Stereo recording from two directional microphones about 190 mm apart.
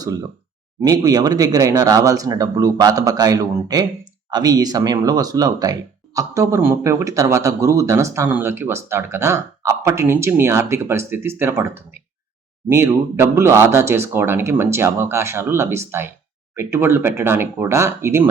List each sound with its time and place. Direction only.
0.8 s a man's voice: 20° right (ahead or behind)